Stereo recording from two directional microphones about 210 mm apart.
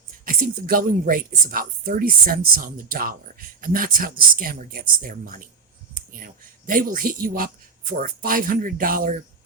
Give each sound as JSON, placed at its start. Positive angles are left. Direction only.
{"t": 0.3, "sound": "speech", "side_deg": -40}